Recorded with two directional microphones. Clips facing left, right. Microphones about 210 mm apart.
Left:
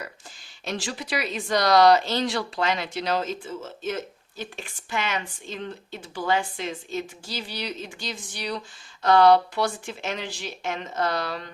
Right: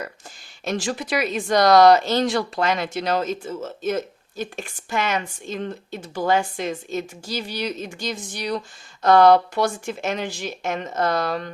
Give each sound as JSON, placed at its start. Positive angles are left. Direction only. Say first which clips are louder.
{"t": 0.6, "sound": "speech", "louder": "right 6 dB", "side_deg": -45}